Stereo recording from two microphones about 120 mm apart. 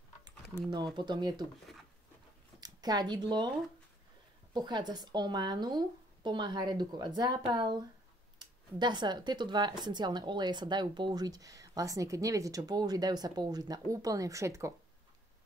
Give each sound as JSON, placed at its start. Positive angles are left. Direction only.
{"t": 0.2, "sound": "speech", "side_deg": -35}
{"t": 2.6, "sound": "speech", "side_deg": -35}
{"t": 4.6, "sound": "speech", "side_deg": -35}